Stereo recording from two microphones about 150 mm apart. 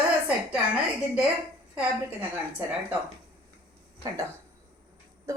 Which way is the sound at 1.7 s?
10° right (ahead or behind).